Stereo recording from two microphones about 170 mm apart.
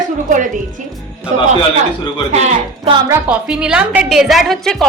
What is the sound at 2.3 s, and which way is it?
Speech, 40° right (ahead or behind).